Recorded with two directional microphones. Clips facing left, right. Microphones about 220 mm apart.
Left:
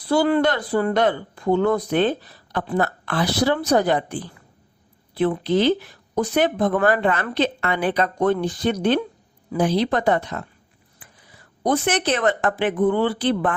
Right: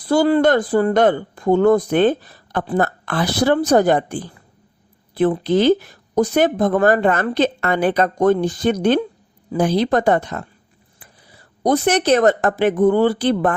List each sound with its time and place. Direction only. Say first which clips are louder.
0.0 s speech: right 4 dB; 45° right (ahead or behind)
5.3 s speech: right 4 dB; 45° right (ahead or behind)
11.6 s speech: right 4 dB; 40° right (ahead or behind)